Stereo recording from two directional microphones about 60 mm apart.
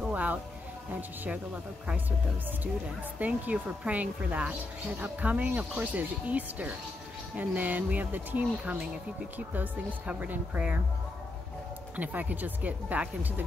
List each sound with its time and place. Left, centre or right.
0.1 s music: right
3.2 s speech: right
10.0 s speech: right
12.0 s speech: right